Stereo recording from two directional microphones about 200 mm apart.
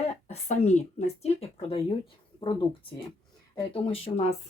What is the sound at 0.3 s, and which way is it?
Speech, 35° left (ahead or behind).